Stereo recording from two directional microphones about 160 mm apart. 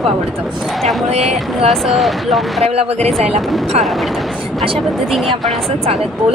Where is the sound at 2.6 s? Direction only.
40° right (ahead or behind).